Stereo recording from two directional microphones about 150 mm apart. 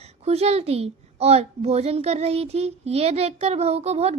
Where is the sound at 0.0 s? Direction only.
45° right (ahead or behind).